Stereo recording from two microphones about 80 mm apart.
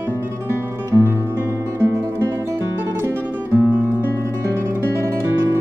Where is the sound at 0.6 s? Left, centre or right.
Right.